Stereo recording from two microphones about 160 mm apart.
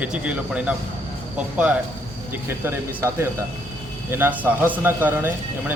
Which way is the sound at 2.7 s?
15° right (ahead or behind).